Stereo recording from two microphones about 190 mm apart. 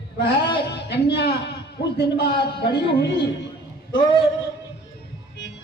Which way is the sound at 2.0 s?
60° left (ahead or behind).